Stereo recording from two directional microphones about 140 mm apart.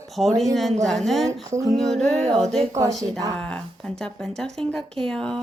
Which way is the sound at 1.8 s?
Centre (ahead or behind).